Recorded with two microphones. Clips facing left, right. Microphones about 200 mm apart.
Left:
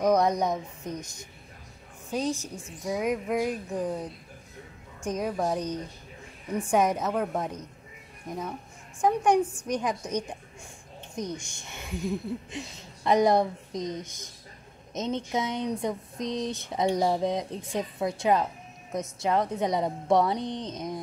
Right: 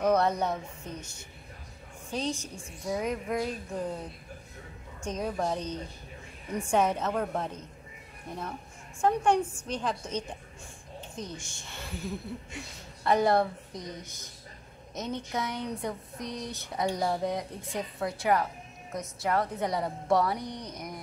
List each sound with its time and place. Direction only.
0.0 s a woman's voice: 15° left (ahead or behind)
2.0 s a woman's voice: 5° left (ahead or behind)
5.0 s a woman's voice: 10° left (ahead or behind)
9.0 s a woman's voice: 15° left (ahead or behind)
11.4 s speech: 20° left (ahead or behind)